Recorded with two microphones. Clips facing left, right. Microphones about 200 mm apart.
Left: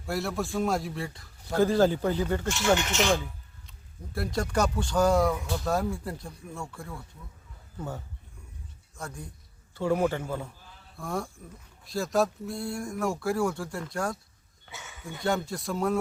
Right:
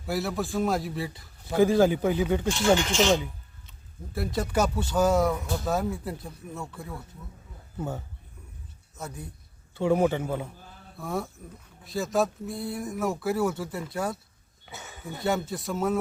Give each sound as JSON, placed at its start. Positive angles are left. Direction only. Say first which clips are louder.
{"t": 0.0, "sound": "speech", "louder": "right 1 dB", "side_deg": 0}
{"t": 2.8, "sound": "a man's voice", "louder": "right 3 dB", "side_deg": -30}
{"t": 3.7, "sound": "speech", "louder": "right 1 dB", "side_deg": 0}
{"t": 9.0, "sound": "speech", "louder": "right 1 dB", "side_deg": -5}
{"t": 9.9, "sound": "a man's voice", "louder": "right 3 dB", "side_deg": -15}
{"t": 10.9, "sound": "speech", "louder": "right 1 dB", "side_deg": -5}
{"t": 14.8, "sound": "a sound", "louder": "right 3 dB", "side_deg": -40}
{"t": 15.2, "sound": "speech", "louder": "right 1 dB", "side_deg": -5}